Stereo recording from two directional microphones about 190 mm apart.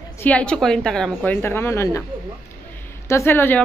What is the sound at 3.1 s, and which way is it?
Speech, 15° left (ahead or behind).